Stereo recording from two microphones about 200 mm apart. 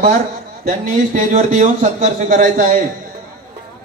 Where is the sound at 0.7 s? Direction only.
40° right (ahead or behind).